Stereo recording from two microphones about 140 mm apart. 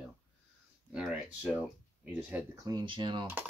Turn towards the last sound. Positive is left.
turn(degrees=-35)  # may be behind; listen again after turning